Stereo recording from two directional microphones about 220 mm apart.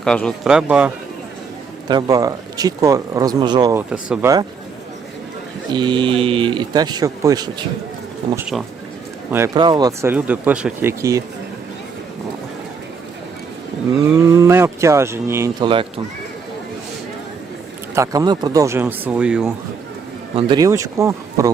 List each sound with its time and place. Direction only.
0.0 s speech: 5° left (ahead or behind)
1.9 s speech: 15° right (ahead or behind)
5.7 s speech: 20° right (ahead or behind)
8.4 s speech: centre (ahead or behind)
9.3 s speech: 15° right (ahead or behind)
14.2 s speech: 10° right (ahead or behind)
17.9 s speech: 15° right (ahead or behind)
20.3 s speech: 20° right (ahead or behind)